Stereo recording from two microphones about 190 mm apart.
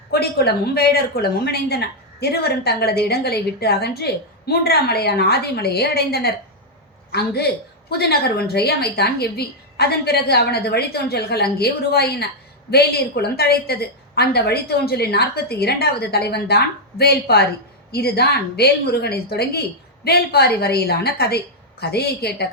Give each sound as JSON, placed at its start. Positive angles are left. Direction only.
{"t": 0.1, "sound": "a woman's voice", "side_deg": 55}